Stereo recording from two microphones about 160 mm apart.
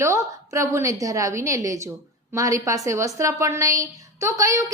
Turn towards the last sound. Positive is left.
turn(degrees=-20)  # may be behind; listen again after turning